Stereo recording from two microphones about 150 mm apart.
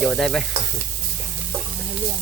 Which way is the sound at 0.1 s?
Centre (ahead or behind).